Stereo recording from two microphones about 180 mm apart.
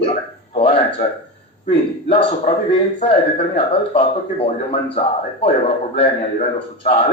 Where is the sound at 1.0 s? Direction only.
25° left (ahead or behind).